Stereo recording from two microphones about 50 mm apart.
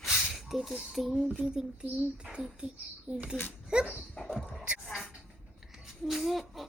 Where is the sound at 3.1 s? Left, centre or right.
Centre.